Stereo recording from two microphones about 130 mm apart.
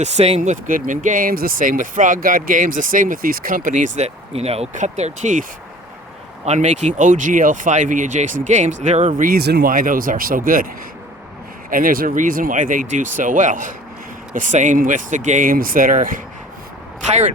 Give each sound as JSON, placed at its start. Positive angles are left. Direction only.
{"t": 0.0, "sound": "speech", "side_deg": -60}
{"t": 6.4, "sound": "speech", "side_deg": -60}
{"t": 11.7, "sound": "speech", "side_deg": -90}
{"t": 17.1, "sound": "speech", "side_deg": -65}